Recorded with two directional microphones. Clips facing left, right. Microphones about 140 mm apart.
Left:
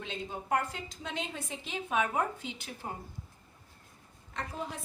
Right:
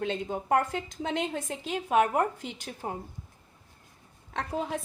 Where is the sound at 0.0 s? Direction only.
60° right (ahead or behind).